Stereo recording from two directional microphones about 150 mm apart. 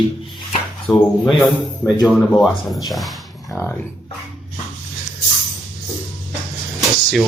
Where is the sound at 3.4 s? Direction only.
15° left (ahead or behind).